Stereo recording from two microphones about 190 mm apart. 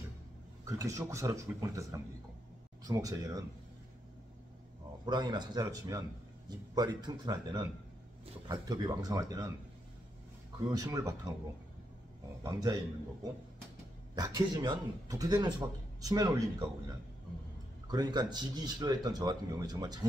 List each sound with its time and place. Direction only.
0.7 s speech: 15° right (ahead or behind)
5.0 s speech: 25° right (ahead or behind)
10.7 s speech: 20° right (ahead or behind)
12.4 s speech: 20° right (ahead or behind)
14.1 s speech: 20° right (ahead or behind)
17.9 s speech: 20° right (ahead or behind)